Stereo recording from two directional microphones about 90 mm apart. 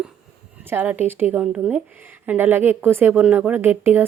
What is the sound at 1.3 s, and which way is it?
Speech, 5° right (ahead or behind).